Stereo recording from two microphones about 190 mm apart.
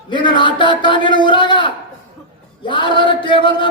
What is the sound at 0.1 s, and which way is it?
A man's voice, 25° left (ahead or behind).